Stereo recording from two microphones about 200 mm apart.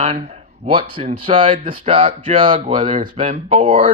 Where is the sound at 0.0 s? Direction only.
30° right (ahead or behind).